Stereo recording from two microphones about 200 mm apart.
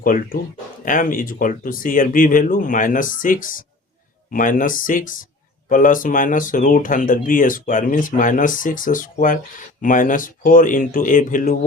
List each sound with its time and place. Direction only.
0.0 s speech: 45° left (ahead or behind)